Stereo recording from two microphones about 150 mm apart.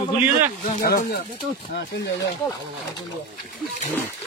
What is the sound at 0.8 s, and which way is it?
Speech, 70° left (ahead or behind).